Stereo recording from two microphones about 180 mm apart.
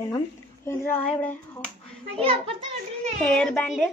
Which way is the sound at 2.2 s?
30° right (ahead or behind).